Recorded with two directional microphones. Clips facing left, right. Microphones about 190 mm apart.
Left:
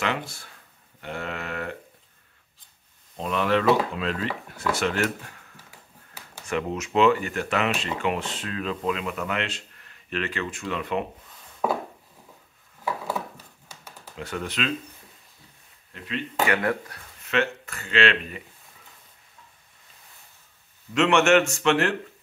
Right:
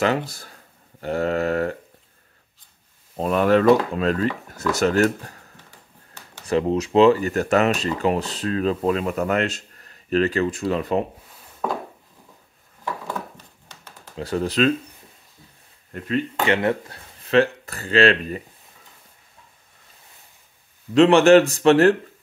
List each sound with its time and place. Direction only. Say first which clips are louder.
0.0 s speech: right 7 dB; 40° right (ahead or behind)
3.2 s speech: right 6 dB; 45° right (ahead or behind)
4.7 s a sound: right 9 dB; 40° right (ahead or behind)
6.4 s speech: right 8 dB; 35° right (ahead or behind)
11.6 s a sound: left 1 dB; 5° left (ahead or behind)
12.8 s a sound: left 1 dB; 10° left (ahead or behind)
14.1 s speech: right 8 dB; 35° right (ahead or behind)
15.9 s speech: right 8 dB; 45° right (ahead or behind)
16.4 s speech: right 3 dB; 25° right (ahead or behind)
20.9 s speech: right 7 dB; 35° right (ahead or behind)